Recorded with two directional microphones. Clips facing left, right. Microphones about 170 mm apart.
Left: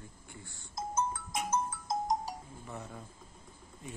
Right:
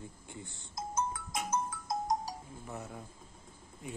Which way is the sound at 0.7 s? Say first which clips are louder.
Left 1 dB; 25° left (ahead or behind).